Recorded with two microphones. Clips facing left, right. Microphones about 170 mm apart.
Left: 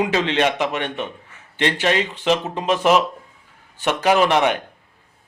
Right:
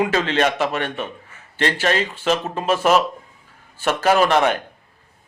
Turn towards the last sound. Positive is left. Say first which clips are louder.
# even
turn(degrees=15)  # may be behind; listen again after turning